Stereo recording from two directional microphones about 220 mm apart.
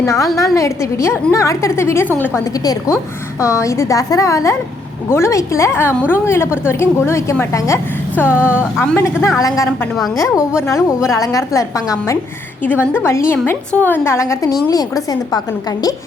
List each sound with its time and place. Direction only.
0.0 s a woman's voice: 15° left (ahead or behind)
10.7 s a woman's voice: 15° left (ahead or behind)